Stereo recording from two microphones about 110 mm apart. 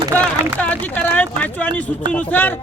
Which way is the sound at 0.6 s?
15° left (ahead or behind).